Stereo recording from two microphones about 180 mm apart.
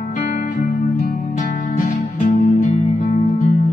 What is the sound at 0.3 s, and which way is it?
Music, 45° left (ahead or behind).